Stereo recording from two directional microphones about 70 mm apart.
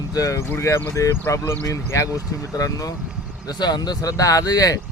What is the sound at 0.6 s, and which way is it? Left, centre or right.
Speech, left.